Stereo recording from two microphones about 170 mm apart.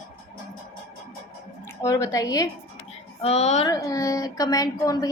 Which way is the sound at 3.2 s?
40° left (ahead or behind).